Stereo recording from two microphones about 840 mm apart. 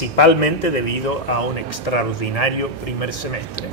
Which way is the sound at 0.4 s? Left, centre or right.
Left.